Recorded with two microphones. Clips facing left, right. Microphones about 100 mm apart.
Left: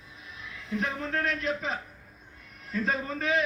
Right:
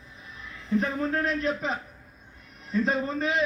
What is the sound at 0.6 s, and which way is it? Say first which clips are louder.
Speech: right 6 dB; 35° right (ahead or behind).